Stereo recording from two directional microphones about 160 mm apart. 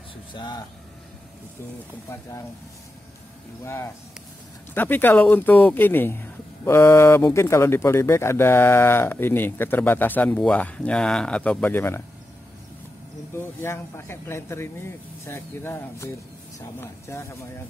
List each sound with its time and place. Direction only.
0.3 s speech: 30° left (ahead or behind)
3.6 s speech: 15° left (ahead or behind)
13.4 s speech: 15° left (ahead or behind)